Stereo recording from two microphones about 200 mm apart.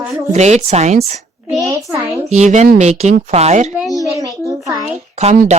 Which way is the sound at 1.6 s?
15° right (ahead or behind).